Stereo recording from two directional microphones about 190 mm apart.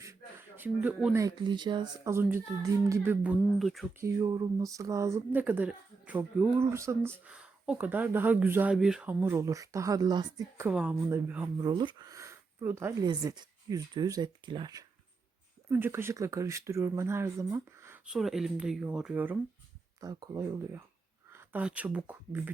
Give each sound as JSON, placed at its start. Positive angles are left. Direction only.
{"t": 0.0, "sound": "a sound", "side_deg": -15}
{"t": 1.5, "sound": "speech", "side_deg": -25}
{"t": 3.6, "sound": "speech", "side_deg": 0}
{"t": 4.0, "sound": "speech", "side_deg": -15}
{"t": 10.7, "sound": "speech", "side_deg": -5}
{"t": 11.5, "sound": "speech", "side_deg": -25}
{"t": 13.1, "sound": "speech", "side_deg": -25}
{"t": 20.0, "sound": "speech", "side_deg": -20}